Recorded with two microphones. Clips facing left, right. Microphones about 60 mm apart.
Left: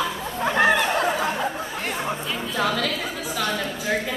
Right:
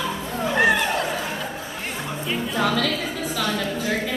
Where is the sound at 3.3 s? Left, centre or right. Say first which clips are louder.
Right 1 dB; centre.